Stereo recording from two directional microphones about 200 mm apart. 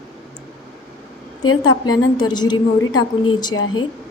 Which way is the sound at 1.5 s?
90° left.